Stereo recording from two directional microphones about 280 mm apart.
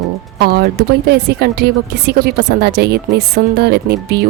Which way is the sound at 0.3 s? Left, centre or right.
Right.